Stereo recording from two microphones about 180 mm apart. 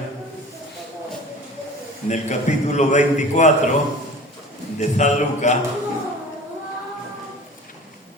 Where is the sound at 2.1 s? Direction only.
40° left (ahead or behind).